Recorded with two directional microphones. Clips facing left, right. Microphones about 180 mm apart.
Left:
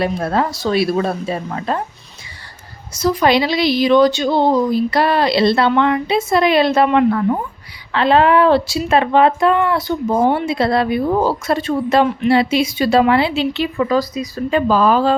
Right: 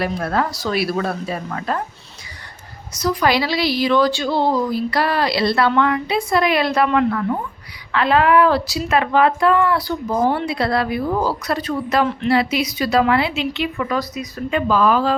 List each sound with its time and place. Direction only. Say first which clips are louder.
0.0 s a woman's voice: left 3 dB; 25° left (ahead or behind)
3.0 s a woman's voice: left 4 dB; 25° left (ahead or behind)